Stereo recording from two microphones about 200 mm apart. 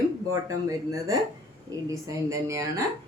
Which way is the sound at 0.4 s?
15° right (ahead or behind).